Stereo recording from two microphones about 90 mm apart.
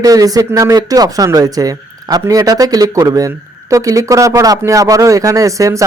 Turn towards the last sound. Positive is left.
turn(degrees=-35)  # may be behind; listen again after turning